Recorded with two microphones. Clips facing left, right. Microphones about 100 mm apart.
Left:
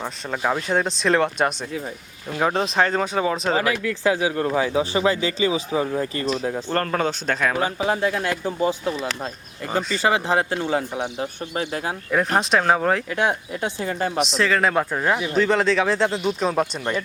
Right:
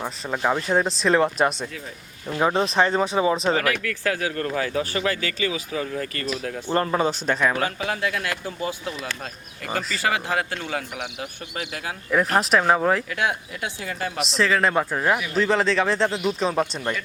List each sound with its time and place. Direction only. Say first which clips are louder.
0.0 s speech: even; 5° right (ahead or behind)
3.6 s speech: left 3 dB; 25° left (ahead or behind)
6.7 s speech: right 3 dB; 10° right (ahead or behind)
7.9 s speech: left 4 dB; 30° left (ahead or behind)
12.4 s speech: even; centre (ahead or behind)
13.1 s speech: left 3 dB; 30° left (ahead or behind)
14.2 s speech: even; centre (ahead or behind)